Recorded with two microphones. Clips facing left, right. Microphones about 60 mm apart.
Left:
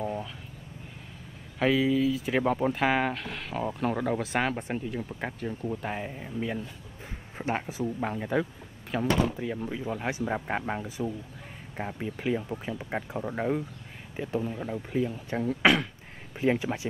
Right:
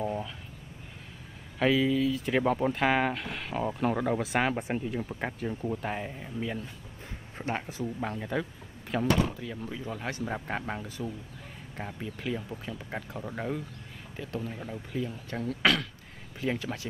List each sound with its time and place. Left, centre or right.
0.0 s vehicle: centre
1.6 s speech: centre
9.4 s speech: centre